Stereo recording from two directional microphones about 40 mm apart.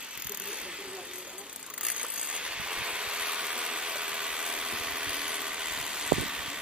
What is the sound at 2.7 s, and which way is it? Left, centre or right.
Ratchet, right.